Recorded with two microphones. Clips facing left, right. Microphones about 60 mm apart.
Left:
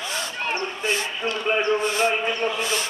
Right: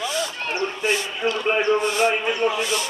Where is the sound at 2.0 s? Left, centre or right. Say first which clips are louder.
Right 2 dB; right.